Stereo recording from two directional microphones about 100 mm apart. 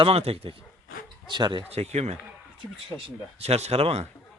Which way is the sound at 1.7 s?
90° right.